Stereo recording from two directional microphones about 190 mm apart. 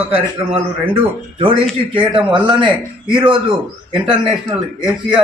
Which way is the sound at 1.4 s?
30° right (ahead or behind).